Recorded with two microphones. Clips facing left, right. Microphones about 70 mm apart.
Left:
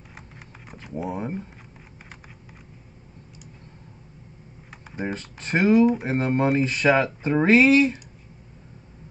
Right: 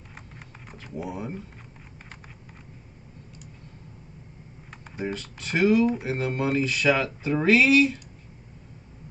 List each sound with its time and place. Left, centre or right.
0.9 s speech: left
4.9 s speech: left